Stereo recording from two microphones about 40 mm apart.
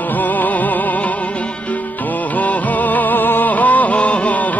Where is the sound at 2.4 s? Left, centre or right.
Left.